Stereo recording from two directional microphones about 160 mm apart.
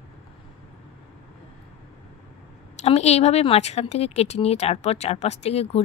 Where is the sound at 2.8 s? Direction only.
40° left (ahead or behind).